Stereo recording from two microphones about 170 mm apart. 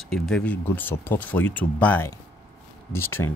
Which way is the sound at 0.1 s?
5° left (ahead or behind).